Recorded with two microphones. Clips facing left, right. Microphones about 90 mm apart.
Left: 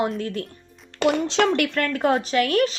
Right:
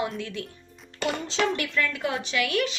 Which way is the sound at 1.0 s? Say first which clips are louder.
Left 7 dB; 75° left (ahead or behind).